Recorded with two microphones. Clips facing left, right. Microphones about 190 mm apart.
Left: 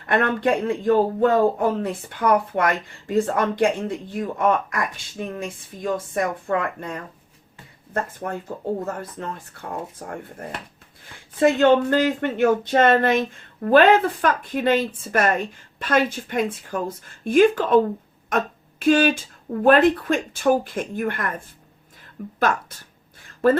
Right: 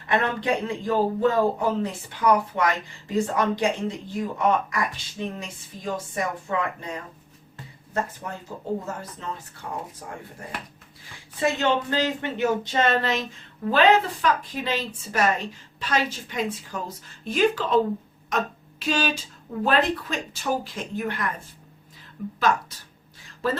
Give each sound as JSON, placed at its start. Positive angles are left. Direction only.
{"t": 0.0, "sound": "speech", "side_deg": 55}
{"t": 8.2, "sound": "speech", "side_deg": 50}
{"t": 22.4, "sound": "speech", "side_deg": 55}